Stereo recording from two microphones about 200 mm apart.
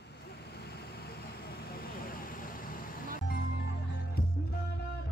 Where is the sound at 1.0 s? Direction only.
50° left (ahead or behind).